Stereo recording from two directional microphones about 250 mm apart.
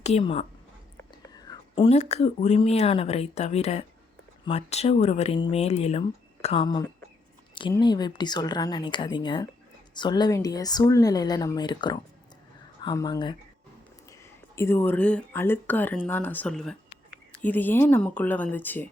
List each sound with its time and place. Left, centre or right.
0.0 s a woman's voice: left; by 18.9 s centre